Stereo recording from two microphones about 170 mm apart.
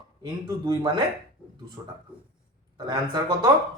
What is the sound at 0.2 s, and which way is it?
Speech, 25° right (ahead or behind).